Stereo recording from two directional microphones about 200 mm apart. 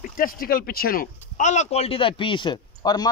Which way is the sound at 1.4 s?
35° left (ahead or behind).